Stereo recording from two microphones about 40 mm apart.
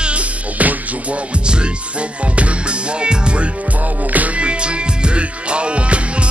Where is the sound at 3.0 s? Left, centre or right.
Right.